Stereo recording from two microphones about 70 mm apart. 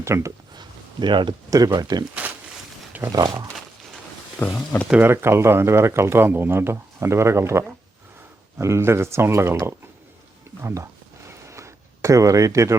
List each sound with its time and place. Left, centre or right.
0.0 s speech: right
0.5 s a sound: right
1.5 s speech: right
3.1 s speech: right
4.4 s speech: left
4.9 s speech: right
8.6 s speech: right
11.3 s a sound: right